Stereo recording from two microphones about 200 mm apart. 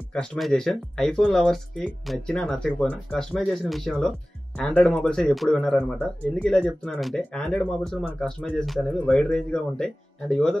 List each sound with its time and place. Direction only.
0.1 s speech: 5° left (ahead or behind)